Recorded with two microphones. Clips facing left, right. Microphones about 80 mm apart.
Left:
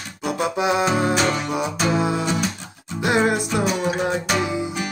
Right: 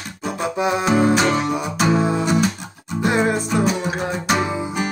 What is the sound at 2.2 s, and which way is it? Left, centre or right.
Music, centre.